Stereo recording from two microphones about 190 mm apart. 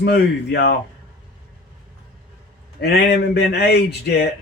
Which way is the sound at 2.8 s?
60° left (ahead or behind).